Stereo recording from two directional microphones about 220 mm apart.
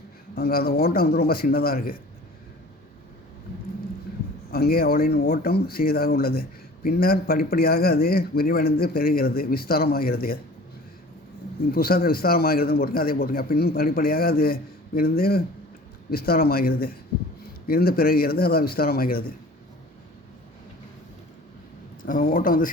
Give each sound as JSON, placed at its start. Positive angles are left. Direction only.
{"t": 0.3, "sound": "a man's voice", "side_deg": 45}
{"t": 4.5, "sound": "a man's voice", "side_deg": 45}
{"t": 11.7, "sound": "a man's voice", "side_deg": 40}
{"t": 22.0, "sound": "speech", "side_deg": 40}